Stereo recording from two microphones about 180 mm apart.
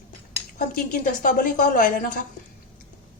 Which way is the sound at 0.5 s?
50° left (ahead or behind).